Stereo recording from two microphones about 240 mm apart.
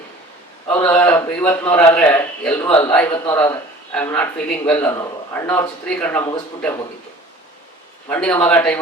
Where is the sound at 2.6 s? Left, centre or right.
Left.